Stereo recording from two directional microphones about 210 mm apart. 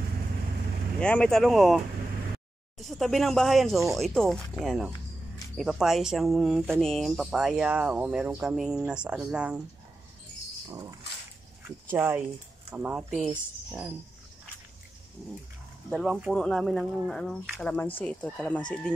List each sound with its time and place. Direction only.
1.0 s speech: 5° left (ahead or behind)
2.8 s speech: centre (ahead or behind)
10.7 s dog: 15° right (ahead or behind)
12.7 s speech: 5° right (ahead or behind)
15.9 s speech: centre (ahead or behind)